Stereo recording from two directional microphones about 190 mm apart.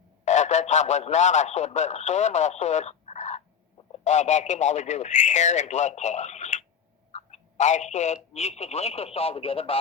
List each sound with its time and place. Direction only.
0.3 s speech: 40° left (ahead or behind)